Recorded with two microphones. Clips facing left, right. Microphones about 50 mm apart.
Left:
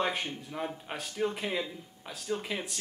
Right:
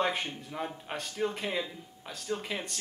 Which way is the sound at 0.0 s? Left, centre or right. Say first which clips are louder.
Right 1 dB; centre.